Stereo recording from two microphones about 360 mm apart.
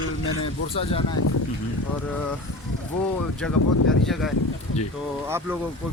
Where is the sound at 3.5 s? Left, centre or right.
Left.